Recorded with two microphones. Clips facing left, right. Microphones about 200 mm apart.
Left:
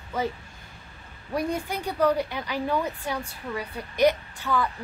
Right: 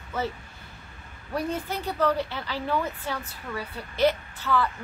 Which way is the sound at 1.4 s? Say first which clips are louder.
Left 1 dB; 15° left (ahead or behind).